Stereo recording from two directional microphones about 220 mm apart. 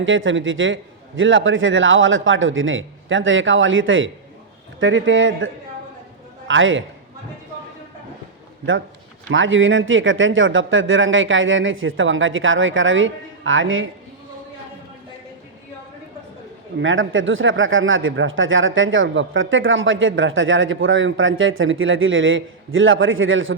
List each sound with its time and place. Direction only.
0.0 s speech: 60° right (ahead or behind)
6.5 s speech: 60° right (ahead or behind)
9.3 s speech: 60° right (ahead or behind)
16.8 s speech: 60° right (ahead or behind)